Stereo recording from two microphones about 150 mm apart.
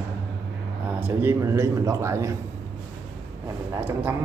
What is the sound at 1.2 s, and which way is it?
A man's voice, 15° right (ahead or behind).